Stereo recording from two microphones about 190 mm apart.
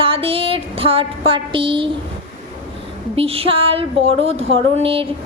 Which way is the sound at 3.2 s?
30° right (ahead or behind).